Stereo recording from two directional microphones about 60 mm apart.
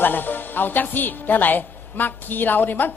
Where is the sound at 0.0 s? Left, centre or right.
Left.